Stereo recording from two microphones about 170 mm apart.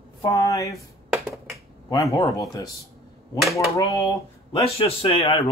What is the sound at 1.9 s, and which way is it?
Speech, 20° left (ahead or behind).